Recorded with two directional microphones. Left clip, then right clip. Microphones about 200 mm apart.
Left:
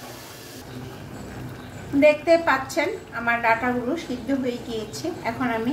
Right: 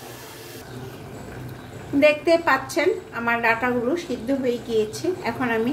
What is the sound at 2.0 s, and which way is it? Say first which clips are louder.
A woman's voice: left 1 dB; 30° right (ahead or behind).